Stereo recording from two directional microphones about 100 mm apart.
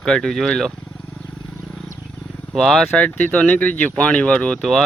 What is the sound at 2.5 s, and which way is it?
Speech, 5° left (ahead or behind).